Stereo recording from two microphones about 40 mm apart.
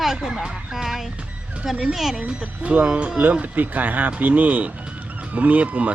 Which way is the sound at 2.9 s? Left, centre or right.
Right.